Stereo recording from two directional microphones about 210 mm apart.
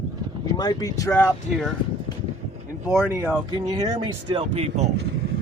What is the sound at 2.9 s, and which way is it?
Speech, 10° right (ahead or behind).